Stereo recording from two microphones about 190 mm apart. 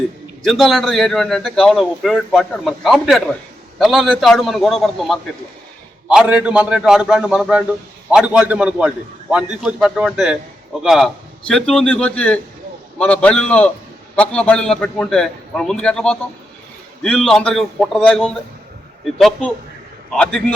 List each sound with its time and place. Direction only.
0.4 s a man's voice: centre (ahead or behind)
20.1 s a man's voice: 5° left (ahead or behind)